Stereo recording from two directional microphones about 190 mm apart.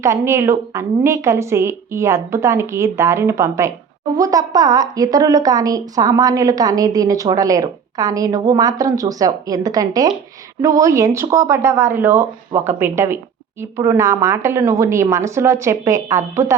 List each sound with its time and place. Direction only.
0.0 s a woman's voice: 15° right (ahead or behind)